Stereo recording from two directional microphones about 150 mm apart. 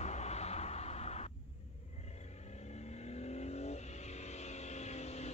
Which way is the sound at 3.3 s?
45° left (ahead or behind).